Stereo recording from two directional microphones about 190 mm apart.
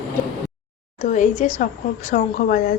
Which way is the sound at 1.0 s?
40° left (ahead or behind).